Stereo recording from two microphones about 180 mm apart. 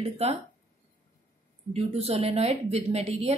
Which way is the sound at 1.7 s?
35° right (ahead or behind).